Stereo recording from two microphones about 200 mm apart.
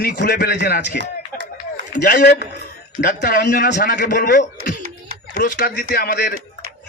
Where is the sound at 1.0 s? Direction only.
65° right (ahead or behind).